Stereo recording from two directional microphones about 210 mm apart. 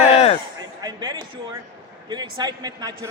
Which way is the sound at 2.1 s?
20° right (ahead or behind).